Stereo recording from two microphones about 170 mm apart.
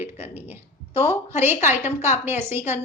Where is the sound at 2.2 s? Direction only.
15° right (ahead or behind).